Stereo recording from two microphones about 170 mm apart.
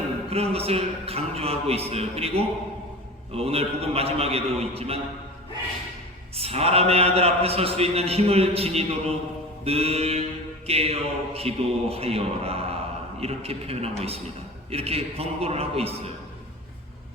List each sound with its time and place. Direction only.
0.3 s a man's voice: 35° right (ahead or behind)
6.3 s a man's voice: 35° right (ahead or behind)